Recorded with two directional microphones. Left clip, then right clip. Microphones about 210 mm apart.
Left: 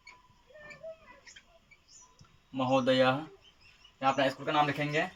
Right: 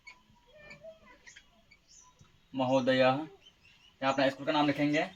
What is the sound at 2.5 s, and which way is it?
Speech, 20° left (ahead or behind).